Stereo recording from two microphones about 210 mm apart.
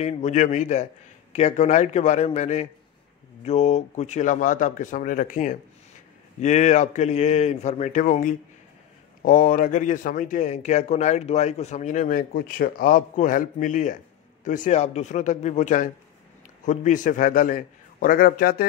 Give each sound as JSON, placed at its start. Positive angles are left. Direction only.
{"t": 0.0, "sound": "a man's voice", "side_deg": 35}